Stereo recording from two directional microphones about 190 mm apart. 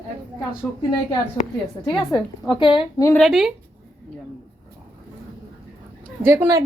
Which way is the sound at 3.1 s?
Centre (ahead or behind).